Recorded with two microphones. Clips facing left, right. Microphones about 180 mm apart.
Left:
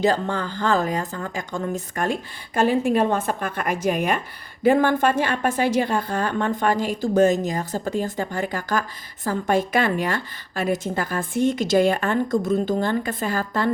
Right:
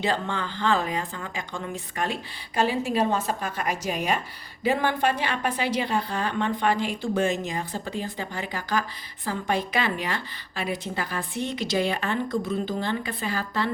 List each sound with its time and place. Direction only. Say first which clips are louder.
0.0 s a woman's voice: left 6 dB; 40° left (ahead or behind)